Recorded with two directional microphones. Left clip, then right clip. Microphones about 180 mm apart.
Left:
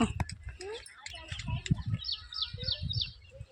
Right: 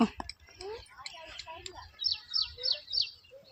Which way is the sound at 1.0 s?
55° right (ahead or behind).